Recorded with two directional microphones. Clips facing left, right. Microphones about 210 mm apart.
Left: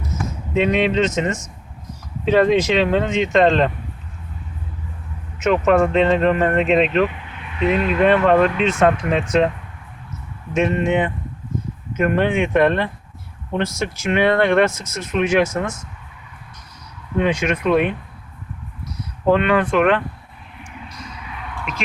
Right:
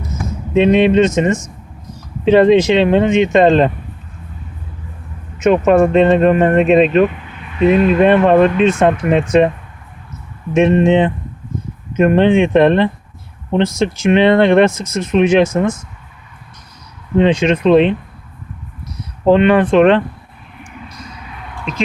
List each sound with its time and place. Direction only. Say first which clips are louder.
0.5 s speech: right 7 dB; 25° right (ahead or behind)
5.5 s speech: right 5 dB; 20° right (ahead or behind)
10.5 s speech: right 7 dB; 20° right (ahead or behind)
17.2 s speech: right 7 dB; 25° right (ahead or behind)
19.3 s speech: right 6 dB; 25° right (ahead or behind)